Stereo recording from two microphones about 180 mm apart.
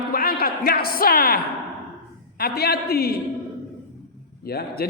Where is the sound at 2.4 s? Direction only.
60° left (ahead or behind).